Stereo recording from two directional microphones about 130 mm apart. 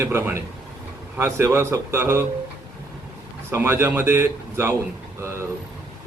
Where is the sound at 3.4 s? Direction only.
20° right (ahead or behind).